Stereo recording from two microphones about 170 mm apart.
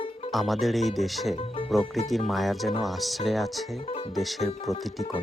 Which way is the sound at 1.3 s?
35° left (ahead or behind).